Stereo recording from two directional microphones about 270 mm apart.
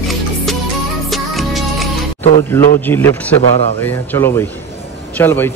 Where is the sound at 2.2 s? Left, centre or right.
Left.